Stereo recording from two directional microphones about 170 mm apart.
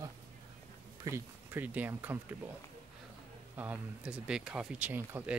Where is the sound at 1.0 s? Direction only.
15° right (ahead or behind).